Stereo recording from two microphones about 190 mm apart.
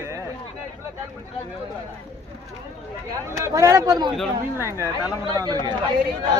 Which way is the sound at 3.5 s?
15° right (ahead or behind).